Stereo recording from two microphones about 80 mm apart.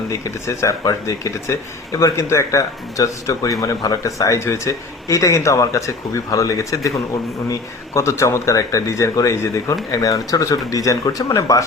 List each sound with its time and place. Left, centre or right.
0.1 s speech: left
7.9 s speech: left